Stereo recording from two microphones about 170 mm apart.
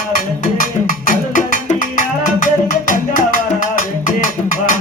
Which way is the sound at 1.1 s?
50° left (ahead or behind).